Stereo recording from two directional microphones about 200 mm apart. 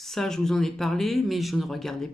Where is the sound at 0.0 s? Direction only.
Centre (ahead or behind).